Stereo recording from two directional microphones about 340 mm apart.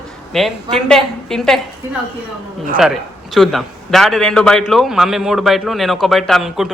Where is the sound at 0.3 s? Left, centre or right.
Centre.